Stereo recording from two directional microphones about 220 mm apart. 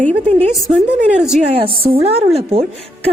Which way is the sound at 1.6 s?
25° right (ahead or behind).